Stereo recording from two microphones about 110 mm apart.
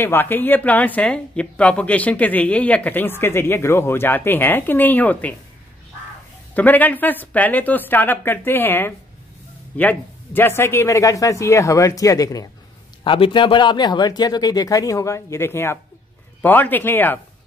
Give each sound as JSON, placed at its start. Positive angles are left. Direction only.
{"t": 0.0, "sound": "speech", "side_deg": 20}
{"t": 6.5, "sound": "speech", "side_deg": 15}
{"t": 13.0, "sound": "speech", "side_deg": 50}